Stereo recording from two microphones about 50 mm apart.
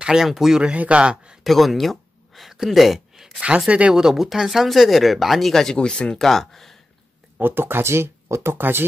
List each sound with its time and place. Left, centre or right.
0.0 s speech: centre
0.7 s a man's voice: right
1.4 s a sound: centre
3.4 s a man's voice: right
3.9 s speech: centre
6.1 s speech: centre
7.3 s speech: right